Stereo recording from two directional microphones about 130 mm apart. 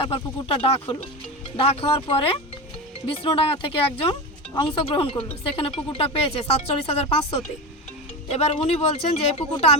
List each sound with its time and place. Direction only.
0.0 s speech: 45° left (ahead or behind)